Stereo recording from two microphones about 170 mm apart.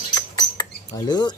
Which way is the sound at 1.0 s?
25° left (ahead or behind).